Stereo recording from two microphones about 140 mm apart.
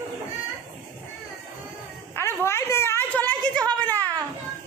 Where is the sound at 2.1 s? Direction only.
15° left (ahead or behind).